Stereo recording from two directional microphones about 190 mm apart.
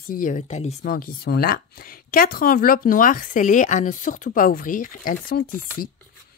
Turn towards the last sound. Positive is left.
turn(degrees=50)  # may be behind; listen again after turning